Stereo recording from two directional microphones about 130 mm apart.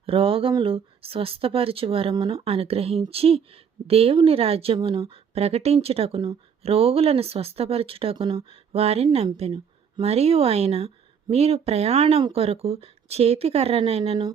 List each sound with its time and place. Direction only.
0.0 s a woman's voice: 45° right (ahead or behind)